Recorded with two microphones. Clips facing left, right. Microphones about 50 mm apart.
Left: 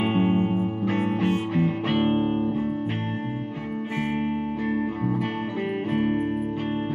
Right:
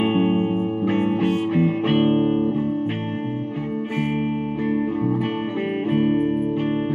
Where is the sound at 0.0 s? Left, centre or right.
Centre.